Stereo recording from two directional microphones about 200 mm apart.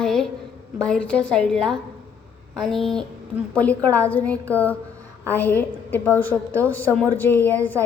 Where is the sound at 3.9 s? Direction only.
20° right (ahead or behind).